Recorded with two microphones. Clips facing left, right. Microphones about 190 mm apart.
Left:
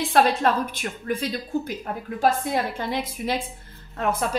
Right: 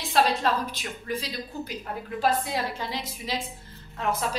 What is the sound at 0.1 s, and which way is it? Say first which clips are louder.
A woman's voice: left 3 dB; 55° left (ahead or behind).